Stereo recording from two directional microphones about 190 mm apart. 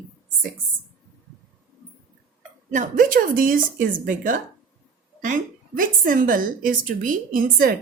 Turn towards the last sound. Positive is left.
turn(degrees=-50)  # may be behind; listen again after turning